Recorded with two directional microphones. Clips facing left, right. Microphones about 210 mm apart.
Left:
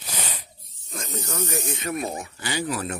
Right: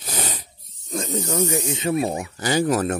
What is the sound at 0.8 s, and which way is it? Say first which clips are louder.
Snake: right 8 dB; 35° right (ahead or behind).